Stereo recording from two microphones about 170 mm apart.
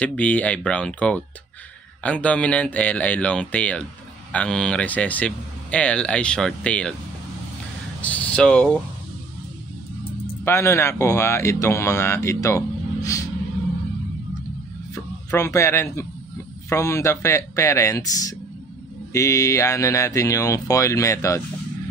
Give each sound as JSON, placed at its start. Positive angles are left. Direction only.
{"t": 0.0, "sound": "speech", "side_deg": 10}
{"t": 8.0, "sound": "speech", "side_deg": 10}
{"t": 10.4, "sound": "speech", "side_deg": 15}
{"t": 15.3, "sound": "speech", "side_deg": 15}